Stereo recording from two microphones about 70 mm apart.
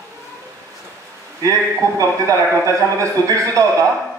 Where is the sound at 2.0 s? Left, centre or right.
Right.